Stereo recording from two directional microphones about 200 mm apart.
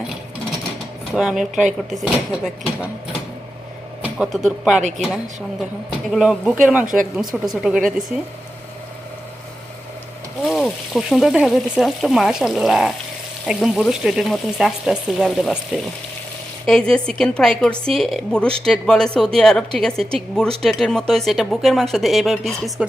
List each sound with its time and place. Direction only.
1.1 s a woman's voice: centre (ahead or behind)
4.0 s speech: centre (ahead or behind)
4.8 s a woman's voice: 35° right (ahead or behind)
5.0 s a woman's voice: centre (ahead or behind)
6.8 s speech: 40° right (ahead or behind)
7.2 s a woman's voice: centre (ahead or behind)
10.4 s a woman's voice: centre (ahead or behind)